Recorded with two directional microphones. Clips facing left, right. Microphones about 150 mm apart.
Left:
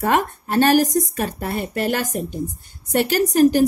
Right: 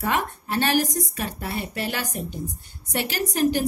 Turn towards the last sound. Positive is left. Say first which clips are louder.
# left 7 dB
turn(degrees=45)  # may be behind; listen again after turning